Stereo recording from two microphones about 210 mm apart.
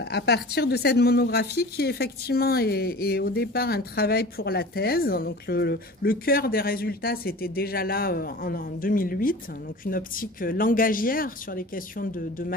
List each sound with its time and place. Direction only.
0.0 s a woman's voice: 50° left (ahead or behind)